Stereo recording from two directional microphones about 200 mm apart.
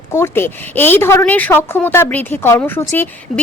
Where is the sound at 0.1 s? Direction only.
15° left (ahead or behind).